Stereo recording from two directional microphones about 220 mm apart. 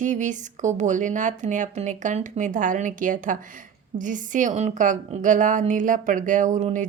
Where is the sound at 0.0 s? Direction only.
35° right (ahead or behind).